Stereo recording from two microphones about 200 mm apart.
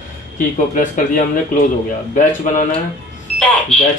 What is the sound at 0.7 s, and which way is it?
Speech, 40° left (ahead or behind).